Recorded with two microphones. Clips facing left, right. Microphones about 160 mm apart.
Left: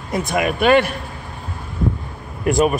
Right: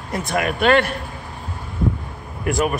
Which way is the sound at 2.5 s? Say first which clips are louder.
Left 4 dB; 20° left (ahead or behind).